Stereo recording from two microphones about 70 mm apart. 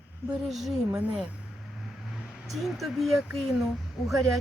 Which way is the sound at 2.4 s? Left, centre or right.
Centre.